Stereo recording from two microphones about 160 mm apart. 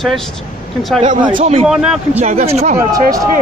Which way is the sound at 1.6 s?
5° right (ahead or behind).